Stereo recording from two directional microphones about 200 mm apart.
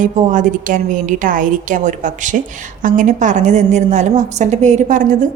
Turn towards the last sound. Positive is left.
turn(degrees=-40)  # may be behind; listen again after turning